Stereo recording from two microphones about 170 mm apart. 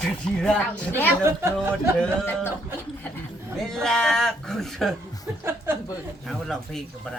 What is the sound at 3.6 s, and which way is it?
Speech, 5° left (ahead or behind).